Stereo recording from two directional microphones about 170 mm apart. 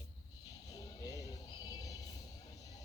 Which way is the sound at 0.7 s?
20° left (ahead or behind).